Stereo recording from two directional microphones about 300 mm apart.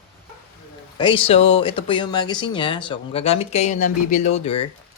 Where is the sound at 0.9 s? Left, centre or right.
Centre.